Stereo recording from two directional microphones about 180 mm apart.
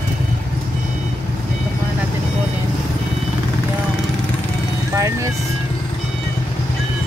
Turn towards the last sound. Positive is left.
turn(degrees=-15)  # may be behind; listen again after turning